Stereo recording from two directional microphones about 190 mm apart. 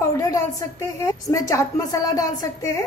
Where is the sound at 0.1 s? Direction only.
15° left (ahead or behind).